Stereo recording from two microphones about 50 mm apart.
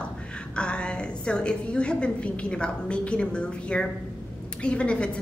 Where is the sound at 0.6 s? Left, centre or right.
Left.